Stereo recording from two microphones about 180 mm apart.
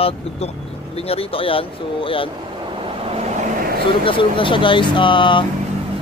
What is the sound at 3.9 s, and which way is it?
Speech, 30° left (ahead or behind).